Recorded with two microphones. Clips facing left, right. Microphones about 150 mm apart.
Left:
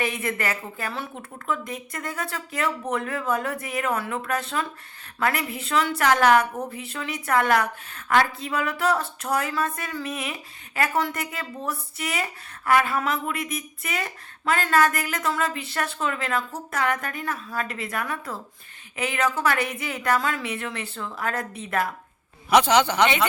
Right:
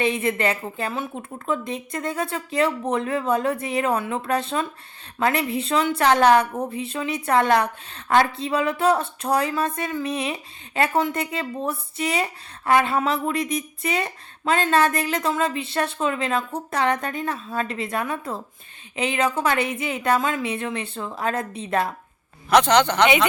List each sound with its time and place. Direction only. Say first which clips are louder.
0.0 s speech: right 5 dB; 25° right (ahead or behind)
22.4 s a man's voice: right 2 dB; 10° left (ahead or behind)